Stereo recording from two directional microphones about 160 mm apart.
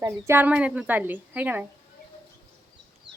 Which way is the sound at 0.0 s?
15° right (ahead or behind).